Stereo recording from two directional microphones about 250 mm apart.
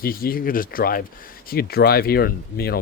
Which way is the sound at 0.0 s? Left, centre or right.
Left.